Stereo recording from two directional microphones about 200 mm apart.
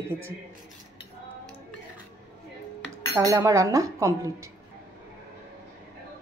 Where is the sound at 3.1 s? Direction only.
15° right (ahead or behind).